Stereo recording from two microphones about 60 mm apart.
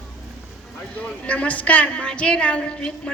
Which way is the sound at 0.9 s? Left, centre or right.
Left.